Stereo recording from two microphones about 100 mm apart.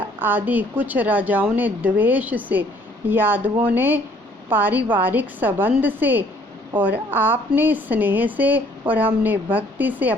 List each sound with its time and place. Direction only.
0.2 s a woman's voice: 20° right (ahead or behind)